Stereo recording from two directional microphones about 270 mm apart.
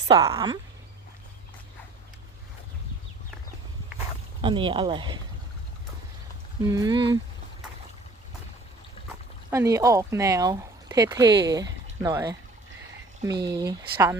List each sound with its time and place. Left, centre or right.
0.1 s speech: centre
4.4 s speech: centre
6.6 s speech: centre
9.5 s speech: centre